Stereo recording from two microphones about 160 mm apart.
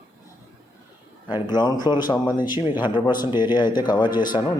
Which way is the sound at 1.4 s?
25° left (ahead or behind).